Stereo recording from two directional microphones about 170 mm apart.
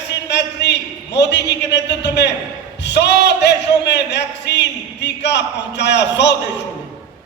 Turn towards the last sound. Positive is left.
turn(degrees=90)